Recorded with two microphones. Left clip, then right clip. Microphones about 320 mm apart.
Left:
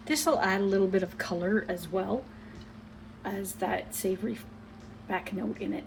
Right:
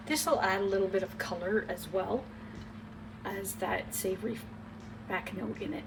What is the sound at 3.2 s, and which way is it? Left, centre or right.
Speech, centre.